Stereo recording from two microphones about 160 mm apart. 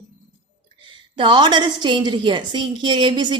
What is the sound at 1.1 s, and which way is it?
A woman's voice, 30° right (ahead or behind).